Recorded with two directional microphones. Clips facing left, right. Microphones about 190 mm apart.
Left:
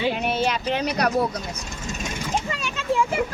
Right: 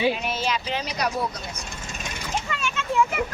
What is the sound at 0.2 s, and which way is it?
Speech, 60° left (ahead or behind).